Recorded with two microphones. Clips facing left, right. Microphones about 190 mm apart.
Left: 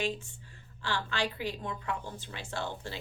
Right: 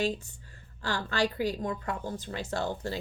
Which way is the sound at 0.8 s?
40° right (ahead or behind).